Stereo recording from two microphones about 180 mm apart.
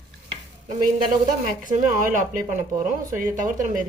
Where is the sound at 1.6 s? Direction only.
45° right (ahead or behind).